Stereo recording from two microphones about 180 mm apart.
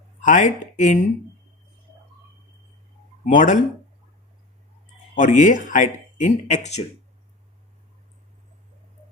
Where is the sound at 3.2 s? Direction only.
45° left (ahead or behind).